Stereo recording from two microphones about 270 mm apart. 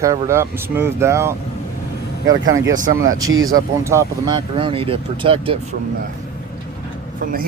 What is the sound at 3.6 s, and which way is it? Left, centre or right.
Speech, centre.